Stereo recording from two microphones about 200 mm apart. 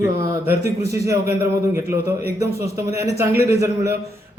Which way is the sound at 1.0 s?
15° right (ahead or behind).